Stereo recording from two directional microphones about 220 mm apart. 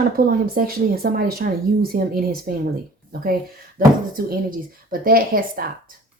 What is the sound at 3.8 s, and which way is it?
Speech, 40° right (ahead or behind).